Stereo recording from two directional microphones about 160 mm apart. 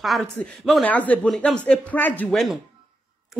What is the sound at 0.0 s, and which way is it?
A woman's voice, centre (ahead or behind).